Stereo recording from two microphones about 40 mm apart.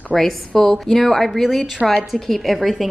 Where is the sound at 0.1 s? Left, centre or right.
Centre.